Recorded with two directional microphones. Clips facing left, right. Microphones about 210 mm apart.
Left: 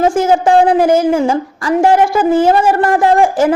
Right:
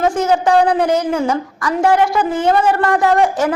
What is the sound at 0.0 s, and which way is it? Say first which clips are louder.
A woman's voice: left 4 dB; 25° left (ahead or behind).